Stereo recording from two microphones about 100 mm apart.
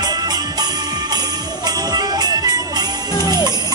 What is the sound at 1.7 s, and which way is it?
Music, 40° right (ahead or behind).